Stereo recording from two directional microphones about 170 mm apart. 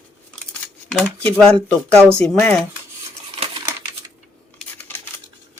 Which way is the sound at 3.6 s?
20° right (ahead or behind).